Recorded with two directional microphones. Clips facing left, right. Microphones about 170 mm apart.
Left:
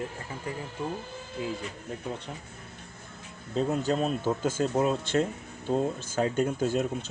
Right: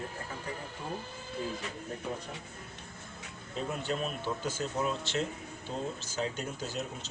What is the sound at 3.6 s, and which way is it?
Speech, 40° left (ahead or behind).